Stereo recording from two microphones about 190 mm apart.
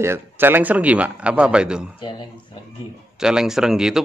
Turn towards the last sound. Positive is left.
turn(degrees=-5)  # may be behind; listen again after turning